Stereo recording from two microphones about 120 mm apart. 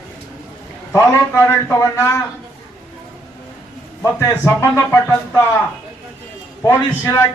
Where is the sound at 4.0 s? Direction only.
25° left (ahead or behind).